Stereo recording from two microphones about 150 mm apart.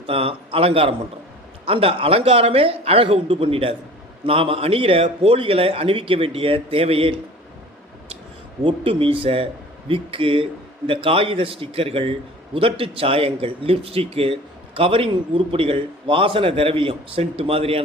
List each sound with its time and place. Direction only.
0.1 s a man's voice: 40° right (ahead or behind)
8.6 s a man's voice: 35° right (ahead or behind)